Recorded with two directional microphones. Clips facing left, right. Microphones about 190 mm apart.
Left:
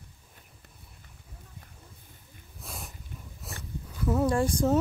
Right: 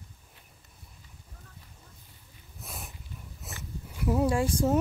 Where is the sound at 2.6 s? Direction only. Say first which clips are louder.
Left 1 dB; centre (ahead or behind).